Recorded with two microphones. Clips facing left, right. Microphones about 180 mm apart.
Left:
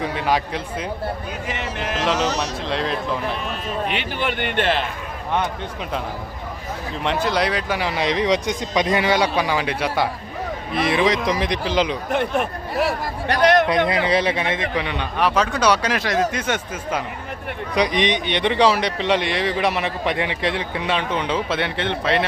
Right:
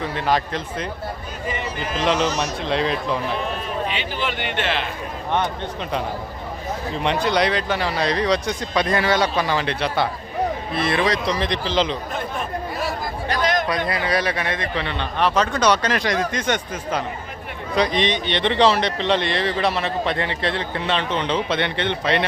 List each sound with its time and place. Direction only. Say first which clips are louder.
0.0 s a man's voice: even; 10° left (ahead or behind)
1.5 s speech: right 1 dB; 80° left
2.0 s speech: right 2 dB; centre (ahead or behind)
3.8 s speech: left 2 dB; 55° left (ahead or behind)
7.0 s a man's voice: right 1 dB; centre (ahead or behind)
12.1 s a man's voice: left 5 dB; 70° left (ahead or behind)
13.7 s a man's voice: left 4 dB; 25° left (ahead or behind); by 22.3 s centre (ahead or behind)